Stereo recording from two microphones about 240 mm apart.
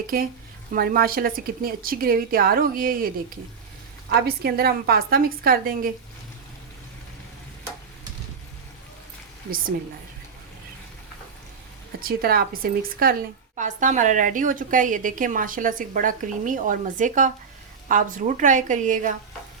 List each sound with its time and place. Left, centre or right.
0.1 s a woman's voice: right
4.4 s a woman's voice: right
11.9 s a woman's voice: right